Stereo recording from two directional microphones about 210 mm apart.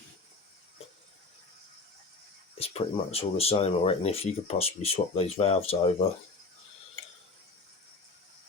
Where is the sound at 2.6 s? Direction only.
30° left (ahead or behind).